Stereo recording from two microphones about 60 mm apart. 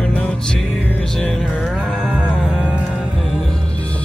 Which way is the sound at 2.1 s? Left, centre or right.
Centre.